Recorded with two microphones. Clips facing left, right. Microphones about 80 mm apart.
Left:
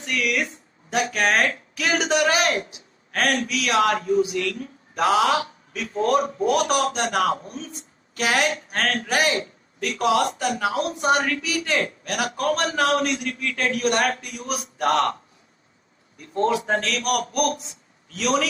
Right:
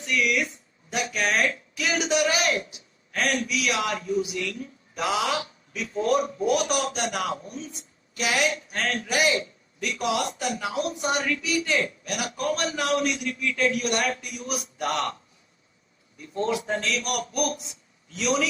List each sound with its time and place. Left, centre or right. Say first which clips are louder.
0.0 s a woman's voice: even; left